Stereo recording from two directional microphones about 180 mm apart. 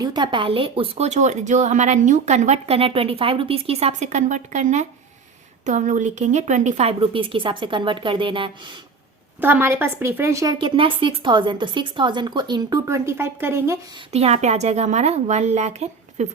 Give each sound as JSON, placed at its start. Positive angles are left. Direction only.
{"t": 0.0, "sound": "a woman's voice", "side_deg": -25}
{"t": 9.4, "sound": "a woman's voice", "side_deg": -10}
{"t": 14.1, "sound": "speech", "side_deg": -35}